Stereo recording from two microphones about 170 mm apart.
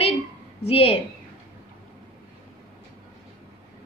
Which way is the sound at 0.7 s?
35° left (ahead or behind).